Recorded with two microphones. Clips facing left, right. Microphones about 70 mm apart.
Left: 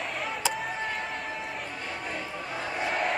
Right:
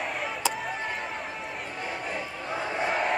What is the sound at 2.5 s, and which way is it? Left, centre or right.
Crowd, centre.